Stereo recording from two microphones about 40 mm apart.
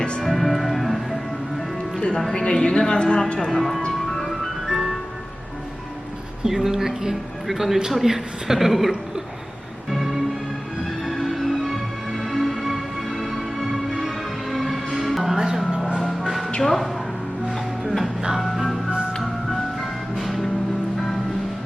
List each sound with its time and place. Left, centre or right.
0.2 s music: centre
2.0 s music: left
2.3 s a woman's voice: left
3.5 s a woman's voice: centre
4.0 s music: centre
4.6 s music: centre
6.4 s a woman's voice: centre
9.9 s music: centre
16.6 s speech: centre
17.5 s music: centre